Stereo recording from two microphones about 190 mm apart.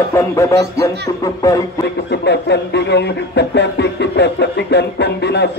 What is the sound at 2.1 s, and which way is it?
Speech, 65° left (ahead or behind).